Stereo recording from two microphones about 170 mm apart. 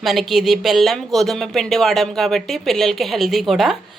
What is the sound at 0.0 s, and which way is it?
Speech, centre (ahead or behind).